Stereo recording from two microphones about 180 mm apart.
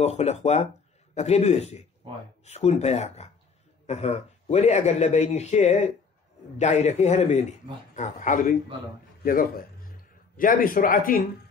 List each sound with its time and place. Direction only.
0.0 s a man's voice: 35° left (ahead or behind)